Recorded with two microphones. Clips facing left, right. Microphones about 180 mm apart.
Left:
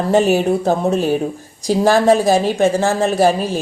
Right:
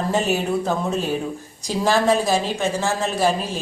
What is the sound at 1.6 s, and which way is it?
A woman's voice, 50° left (ahead or behind).